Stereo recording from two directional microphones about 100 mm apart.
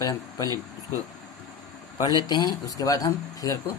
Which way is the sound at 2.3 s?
40° left (ahead or behind).